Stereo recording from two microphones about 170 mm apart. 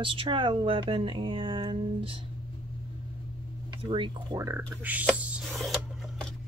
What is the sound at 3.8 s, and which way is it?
Speech, 30° right (ahead or behind).